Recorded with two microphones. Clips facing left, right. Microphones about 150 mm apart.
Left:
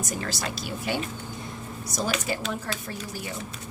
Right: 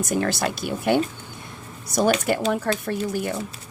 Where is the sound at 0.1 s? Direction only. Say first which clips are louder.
Right 8 dB; 60° right (ahead or behind).